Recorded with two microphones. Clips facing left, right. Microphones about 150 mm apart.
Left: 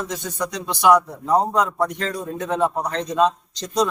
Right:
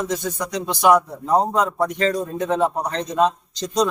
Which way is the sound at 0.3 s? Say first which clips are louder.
Right 1 dB; 5° right (ahead or behind).